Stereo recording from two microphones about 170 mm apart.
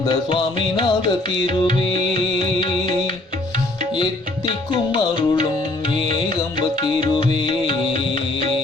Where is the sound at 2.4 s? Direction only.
30° left (ahead or behind).